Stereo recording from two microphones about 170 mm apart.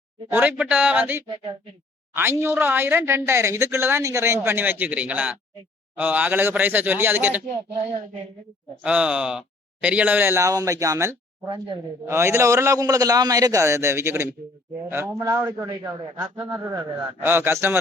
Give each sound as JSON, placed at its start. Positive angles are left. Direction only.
{"t": 0.3, "sound": "a woman's voice", "side_deg": -10}
{"t": 8.8, "sound": "a woman's voice", "side_deg": -5}
{"t": 16.4, "sound": "a woman's voice", "side_deg": -10}